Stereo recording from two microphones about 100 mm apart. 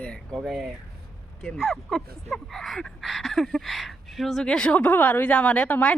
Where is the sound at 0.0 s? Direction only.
10° left (ahead or behind).